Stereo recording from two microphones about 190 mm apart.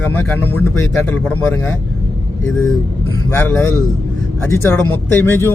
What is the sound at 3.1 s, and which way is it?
Speech, 10° left (ahead or behind).